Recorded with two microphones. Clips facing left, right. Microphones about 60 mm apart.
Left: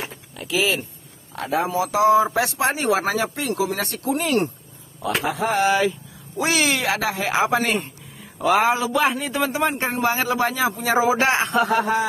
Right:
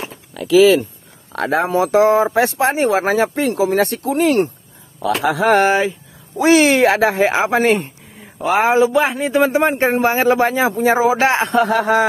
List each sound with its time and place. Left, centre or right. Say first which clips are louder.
1.3 s speech: right 6 dB; right
1.9 s speech: right 2 dB; right
5.0 s a man's voice: right 7 dB; right
5.7 s speech: right 3 dB; right
11.7 s speech: right 5 dB; right